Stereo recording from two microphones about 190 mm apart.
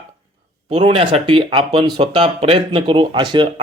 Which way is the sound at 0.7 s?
35° right (ahead or behind).